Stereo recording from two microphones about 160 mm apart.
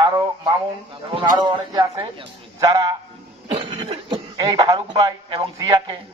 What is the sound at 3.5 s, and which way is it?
Speech, 35° right (ahead or behind).